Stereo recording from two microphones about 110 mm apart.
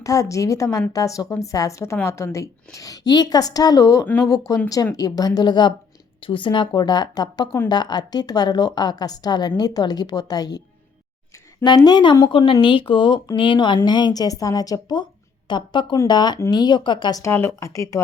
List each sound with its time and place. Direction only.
0.0 s a woman's voice: 30° left (ahead or behind)
11.6 s a woman's voice: 40° left (ahead or behind)
12.2 s a woman's voice: 50° left (ahead or behind); by 18.0 s 30° left (ahead or behind)